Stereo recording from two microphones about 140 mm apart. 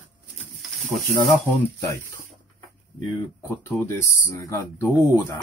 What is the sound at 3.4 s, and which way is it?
Speech, 20° left (ahead or behind).